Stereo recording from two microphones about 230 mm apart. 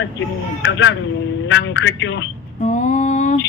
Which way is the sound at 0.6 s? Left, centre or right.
Left.